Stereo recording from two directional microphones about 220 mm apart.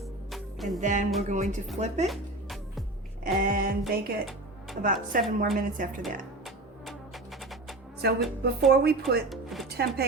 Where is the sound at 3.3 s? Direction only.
40° right (ahead or behind).